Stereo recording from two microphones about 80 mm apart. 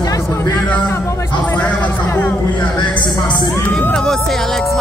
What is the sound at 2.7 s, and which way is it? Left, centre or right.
Speech, left.